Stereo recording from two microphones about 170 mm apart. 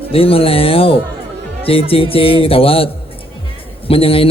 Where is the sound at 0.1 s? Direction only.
35° left (ahead or behind).